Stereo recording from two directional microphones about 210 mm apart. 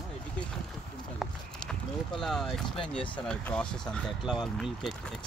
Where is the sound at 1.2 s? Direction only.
Centre (ahead or behind).